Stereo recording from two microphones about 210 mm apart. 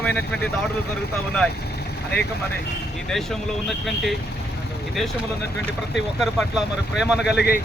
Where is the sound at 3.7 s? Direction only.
Centre (ahead or behind).